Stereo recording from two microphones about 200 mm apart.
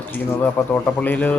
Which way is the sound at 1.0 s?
10° left (ahead or behind).